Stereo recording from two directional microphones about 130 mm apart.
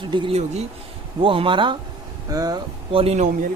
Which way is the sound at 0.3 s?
55° right (ahead or behind).